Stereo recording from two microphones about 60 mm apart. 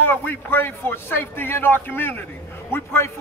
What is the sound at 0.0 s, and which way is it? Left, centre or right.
A man's voice, left.